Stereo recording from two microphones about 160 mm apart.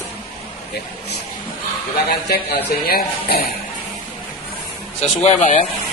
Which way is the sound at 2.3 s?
70° left (ahead or behind).